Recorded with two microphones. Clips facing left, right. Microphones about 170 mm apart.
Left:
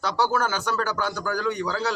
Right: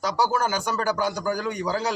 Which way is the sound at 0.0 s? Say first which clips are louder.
Even; 10° right (ahead or behind).